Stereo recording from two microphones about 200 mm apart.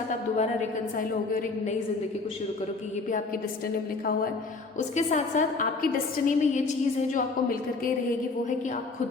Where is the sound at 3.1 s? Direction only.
45° left (ahead or behind).